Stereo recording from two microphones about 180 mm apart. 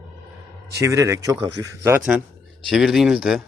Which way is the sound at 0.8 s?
15° right (ahead or behind).